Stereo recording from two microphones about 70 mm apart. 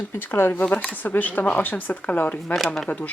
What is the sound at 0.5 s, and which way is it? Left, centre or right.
Speech, left.